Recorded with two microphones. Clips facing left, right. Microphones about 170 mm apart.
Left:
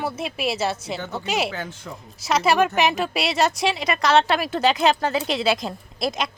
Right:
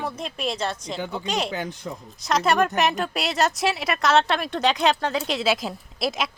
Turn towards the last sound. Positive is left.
turn(degrees=0)  # may be behind; listen again after turning